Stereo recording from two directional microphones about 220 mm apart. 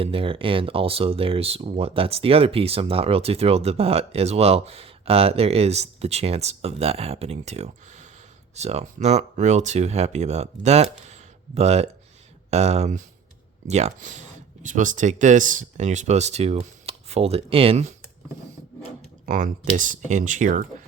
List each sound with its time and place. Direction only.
0.0 s speech: 25° right (ahead or behind)
19.2 s speech: 35° right (ahead or behind)